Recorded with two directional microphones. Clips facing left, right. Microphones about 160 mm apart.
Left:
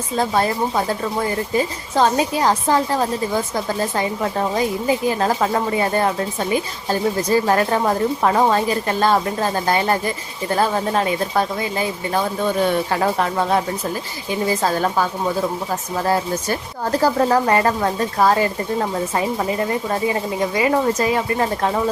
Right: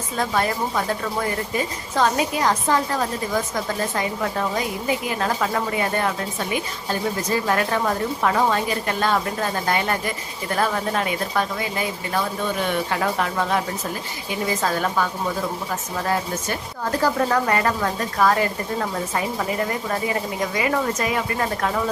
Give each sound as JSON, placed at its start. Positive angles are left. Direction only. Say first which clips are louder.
{"t": 0.2, "sound": "a woman's voice", "louder": "left 3 dB", "side_deg": 30}